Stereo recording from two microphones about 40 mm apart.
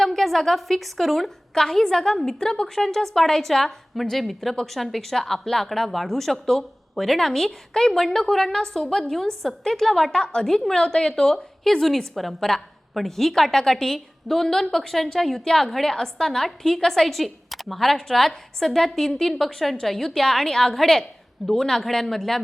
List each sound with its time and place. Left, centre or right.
0.0 s a woman's voice: centre
10.1 s a woman's voice: left
10.4 s a woman's voice: centre